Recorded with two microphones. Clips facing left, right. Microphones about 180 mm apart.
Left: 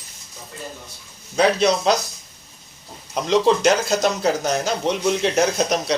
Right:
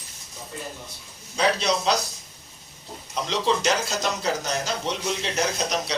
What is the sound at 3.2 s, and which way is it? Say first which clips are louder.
A man's voice: left 7 dB; 50° left (ahead or behind).